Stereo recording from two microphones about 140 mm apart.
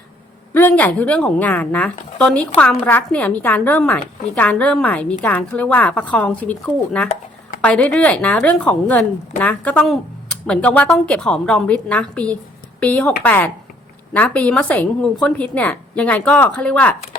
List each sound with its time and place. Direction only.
0.5 s a woman's voice: 10° left (ahead or behind)